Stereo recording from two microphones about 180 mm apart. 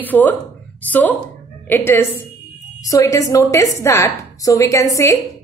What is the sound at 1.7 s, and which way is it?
A woman's voice, 10° left (ahead or behind).